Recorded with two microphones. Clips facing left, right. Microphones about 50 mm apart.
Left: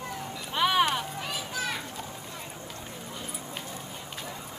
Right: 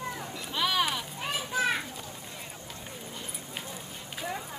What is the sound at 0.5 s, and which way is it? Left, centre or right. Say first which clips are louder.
Clip-clop: left 4 dB; centre.